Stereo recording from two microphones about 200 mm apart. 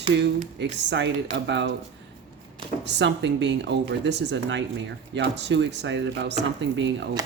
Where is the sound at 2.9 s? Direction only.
60° right (ahead or behind).